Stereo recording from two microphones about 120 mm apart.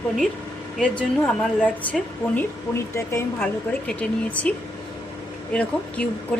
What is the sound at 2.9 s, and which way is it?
Speech, 25° left (ahead or behind).